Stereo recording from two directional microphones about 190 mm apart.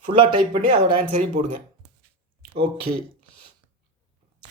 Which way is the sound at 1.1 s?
40° right (ahead or behind).